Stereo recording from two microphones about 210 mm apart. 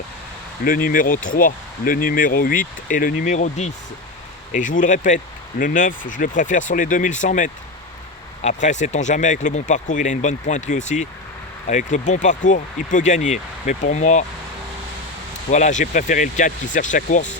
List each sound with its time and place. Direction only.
0.6 s speech: 45° left (ahead or behind)
15.4 s speech: 35° left (ahead or behind)